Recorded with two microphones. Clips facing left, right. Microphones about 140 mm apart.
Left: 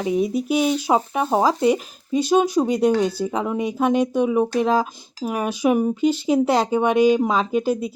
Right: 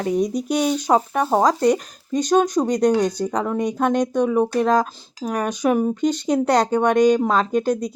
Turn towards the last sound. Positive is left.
turn(degrees=5)  # may be behind; listen again after turning